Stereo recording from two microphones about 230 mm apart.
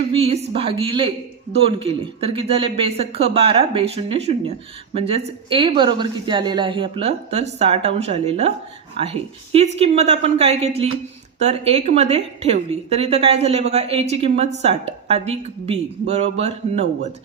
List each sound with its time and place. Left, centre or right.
0.1 s a woman's voice: right